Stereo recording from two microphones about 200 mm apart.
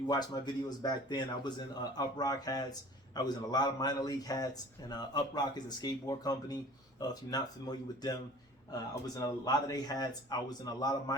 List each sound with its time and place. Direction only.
0.1 s a man's voice: 20° left (ahead or behind)